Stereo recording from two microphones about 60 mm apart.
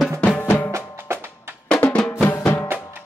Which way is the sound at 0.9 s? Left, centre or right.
Right.